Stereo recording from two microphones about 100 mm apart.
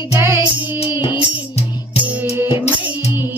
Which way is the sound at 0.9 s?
50° left (ahead or behind).